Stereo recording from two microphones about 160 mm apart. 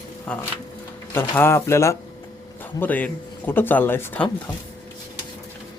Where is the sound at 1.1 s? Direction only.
15° left (ahead or behind).